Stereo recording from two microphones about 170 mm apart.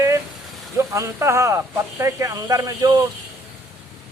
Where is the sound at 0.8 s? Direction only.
15° right (ahead or behind).